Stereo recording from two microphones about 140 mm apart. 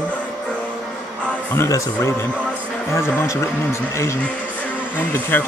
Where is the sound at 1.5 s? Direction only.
20° left (ahead or behind).